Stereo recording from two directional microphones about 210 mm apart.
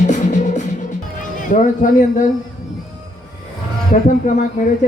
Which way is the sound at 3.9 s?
35° left (ahead or behind).